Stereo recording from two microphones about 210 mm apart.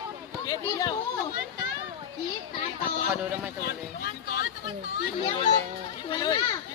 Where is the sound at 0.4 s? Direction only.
20° left (ahead or behind).